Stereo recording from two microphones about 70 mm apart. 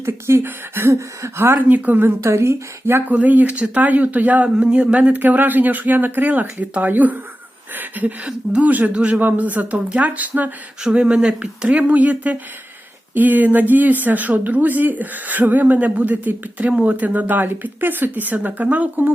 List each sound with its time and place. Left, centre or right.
0.0 s speech: right
1.5 s speech: right
3.1 s speech: right